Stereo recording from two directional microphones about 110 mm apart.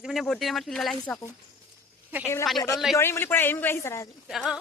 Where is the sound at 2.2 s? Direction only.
25° left (ahead or behind).